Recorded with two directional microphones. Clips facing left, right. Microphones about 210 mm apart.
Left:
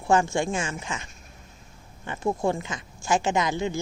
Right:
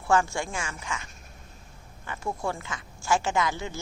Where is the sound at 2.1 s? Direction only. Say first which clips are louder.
Left 6 dB; 20° left (ahead or behind).